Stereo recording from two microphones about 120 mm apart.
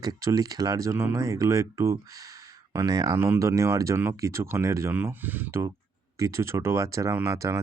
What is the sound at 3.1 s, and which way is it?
Speech, 20° right (ahead or behind).